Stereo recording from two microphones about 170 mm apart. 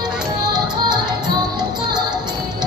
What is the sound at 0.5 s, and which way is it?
Music, 25° right (ahead or behind).